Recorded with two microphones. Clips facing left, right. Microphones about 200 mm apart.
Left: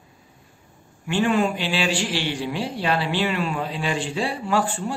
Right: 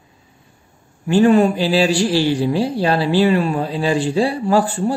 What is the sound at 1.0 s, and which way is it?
A man's voice, 40° right (ahead or behind).